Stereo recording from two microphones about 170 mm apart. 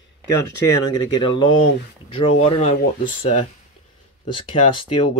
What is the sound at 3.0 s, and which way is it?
Speech, 55° left (ahead or behind).